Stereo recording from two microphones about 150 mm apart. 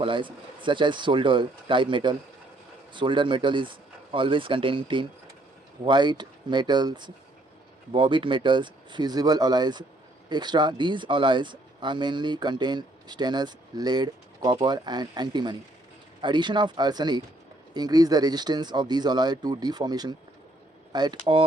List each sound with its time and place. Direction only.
0.0 s speech: 35° right (ahead or behind)